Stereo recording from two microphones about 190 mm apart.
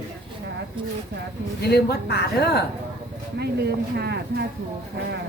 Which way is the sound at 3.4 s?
60° right (ahead or behind).